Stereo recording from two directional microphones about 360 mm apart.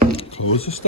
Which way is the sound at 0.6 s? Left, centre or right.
Centre.